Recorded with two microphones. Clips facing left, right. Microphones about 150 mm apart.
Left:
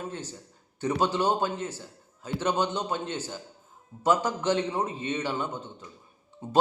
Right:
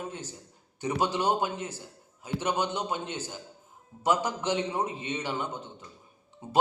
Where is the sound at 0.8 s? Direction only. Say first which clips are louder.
Left 2 dB; 15° right (ahead or behind).